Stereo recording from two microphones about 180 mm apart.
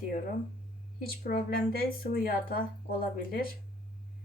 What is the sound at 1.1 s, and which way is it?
A woman's voice, 55° left (ahead or behind).